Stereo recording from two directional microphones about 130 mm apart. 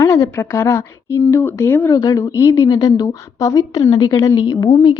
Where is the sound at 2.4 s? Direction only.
20° left (ahead or behind).